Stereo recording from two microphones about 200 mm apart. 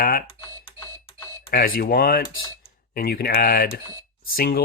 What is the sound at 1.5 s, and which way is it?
Speech, 45° left (ahead or behind).